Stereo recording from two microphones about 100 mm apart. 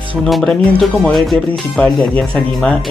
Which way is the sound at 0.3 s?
5° left (ahead or behind).